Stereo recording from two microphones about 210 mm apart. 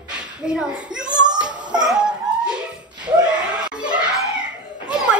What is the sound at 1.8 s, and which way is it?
Dog, centre (ahead or behind).